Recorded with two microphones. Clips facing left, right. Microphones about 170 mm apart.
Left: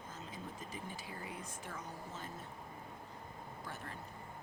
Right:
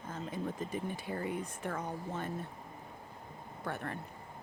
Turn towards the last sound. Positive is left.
turn(degrees=-60)  # may be behind; listen again after turning